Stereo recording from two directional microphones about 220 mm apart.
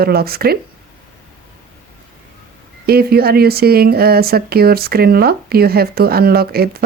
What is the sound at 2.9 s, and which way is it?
Speech, 45° right (ahead or behind).